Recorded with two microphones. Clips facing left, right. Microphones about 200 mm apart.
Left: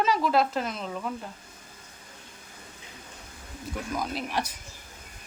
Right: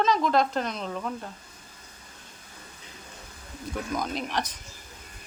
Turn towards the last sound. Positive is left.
turn(degrees=10)  # may be behind; listen again after turning